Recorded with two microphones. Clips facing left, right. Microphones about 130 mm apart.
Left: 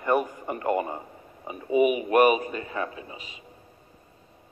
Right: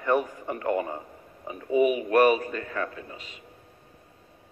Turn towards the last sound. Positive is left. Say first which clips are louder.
# even
turn(degrees=10)  # may be behind; listen again after turning